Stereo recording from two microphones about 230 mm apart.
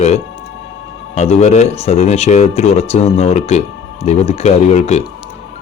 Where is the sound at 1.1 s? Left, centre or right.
Left.